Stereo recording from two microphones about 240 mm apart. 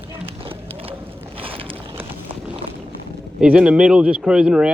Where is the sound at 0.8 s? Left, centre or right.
Right.